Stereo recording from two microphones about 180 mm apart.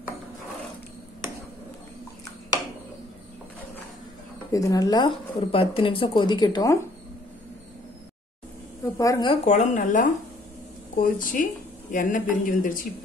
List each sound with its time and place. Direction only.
4.5 s speech: 20° left (ahead or behind)
8.9 s speech: 20° left (ahead or behind)
9.3 s speech: 40° left (ahead or behind)